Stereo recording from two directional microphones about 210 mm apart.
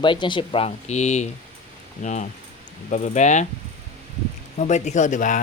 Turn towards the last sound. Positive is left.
turn(degrees=35)  # may be behind; listen again after turning